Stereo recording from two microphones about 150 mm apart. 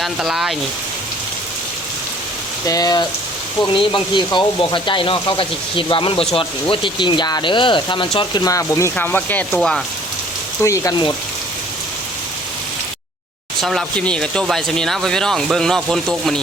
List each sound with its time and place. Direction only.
0.0 s speech: 5° right (ahead or behind)
2.6 s speech: 25° left (ahead or behind); by 9.8 s centre (ahead or behind)
10.6 s speech: 20° left (ahead or behind)
13.6 s speech: centre (ahead or behind)